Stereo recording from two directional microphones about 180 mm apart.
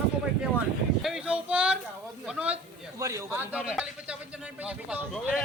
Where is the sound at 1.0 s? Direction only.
5° right (ahead or behind).